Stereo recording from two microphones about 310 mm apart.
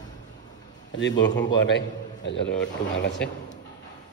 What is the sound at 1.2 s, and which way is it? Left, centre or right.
A man's voice, left.